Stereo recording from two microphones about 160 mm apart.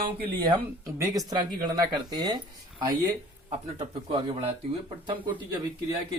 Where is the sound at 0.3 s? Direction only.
30° right (ahead or behind).